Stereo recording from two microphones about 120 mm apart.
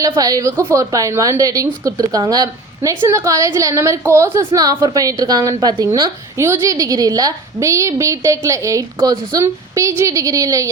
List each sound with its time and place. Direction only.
0.0 s a woman's voice: 30° right (ahead or behind)